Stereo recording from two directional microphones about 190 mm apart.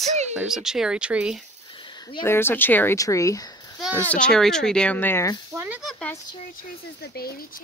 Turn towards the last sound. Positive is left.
turn(degrees=50)  # may be behind; listen again after turning